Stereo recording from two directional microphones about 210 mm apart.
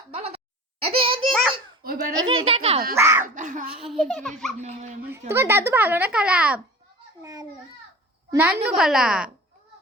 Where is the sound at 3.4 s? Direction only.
40° right (ahead or behind).